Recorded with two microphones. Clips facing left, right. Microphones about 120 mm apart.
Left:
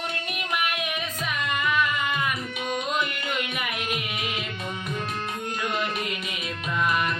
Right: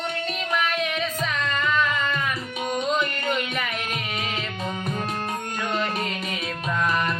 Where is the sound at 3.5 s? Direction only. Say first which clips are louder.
Right 1 dB; 10° left (ahead or behind).